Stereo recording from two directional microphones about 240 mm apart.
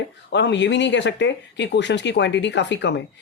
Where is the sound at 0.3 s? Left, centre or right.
Left.